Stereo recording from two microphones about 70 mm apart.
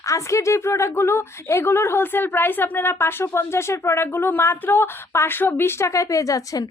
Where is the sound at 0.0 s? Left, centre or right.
Left.